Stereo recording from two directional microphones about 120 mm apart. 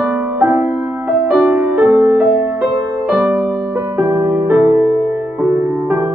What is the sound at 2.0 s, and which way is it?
Music, 20° right (ahead or behind).